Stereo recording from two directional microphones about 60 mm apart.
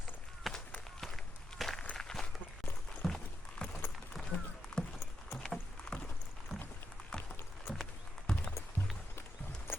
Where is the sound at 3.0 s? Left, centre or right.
Centre.